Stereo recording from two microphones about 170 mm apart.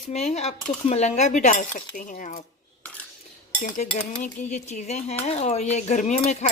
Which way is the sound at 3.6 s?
50° left (ahead or behind).